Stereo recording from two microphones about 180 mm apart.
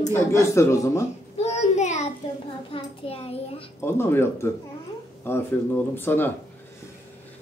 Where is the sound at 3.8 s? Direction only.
15° left (ahead or behind).